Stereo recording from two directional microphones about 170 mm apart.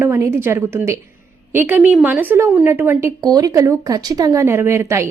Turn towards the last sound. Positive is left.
turn(degrees=-15)  # may be behind; listen again after turning